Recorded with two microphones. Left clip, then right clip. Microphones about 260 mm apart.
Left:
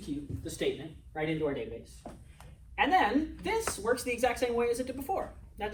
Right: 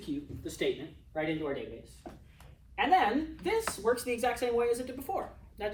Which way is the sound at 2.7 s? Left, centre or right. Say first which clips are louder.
Even; centre.